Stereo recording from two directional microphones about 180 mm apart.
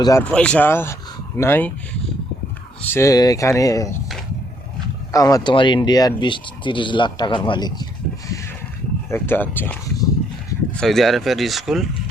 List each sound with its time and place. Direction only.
0.0 s speech: 15° left (ahead or behind)
0.3 s speech: 5° left (ahead or behind)
2.9 s speech: 15° left (ahead or behind)
5.1 s speech: 20° left (ahead or behind)
9.0 s speech: 10° left (ahead or behind)